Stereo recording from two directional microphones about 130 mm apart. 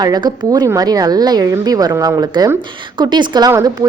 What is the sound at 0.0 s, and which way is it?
A woman's voice, 30° right (ahead or behind).